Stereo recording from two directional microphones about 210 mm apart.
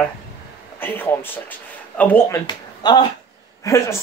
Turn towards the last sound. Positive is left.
turn(degrees=15)  # may be behind; listen again after turning